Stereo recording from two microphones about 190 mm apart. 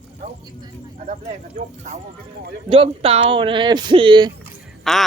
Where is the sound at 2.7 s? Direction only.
30° right (ahead or behind).